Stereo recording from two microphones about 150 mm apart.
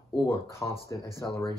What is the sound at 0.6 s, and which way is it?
Speech, 20° left (ahead or behind).